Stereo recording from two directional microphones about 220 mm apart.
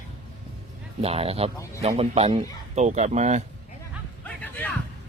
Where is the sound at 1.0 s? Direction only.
25° right (ahead or behind).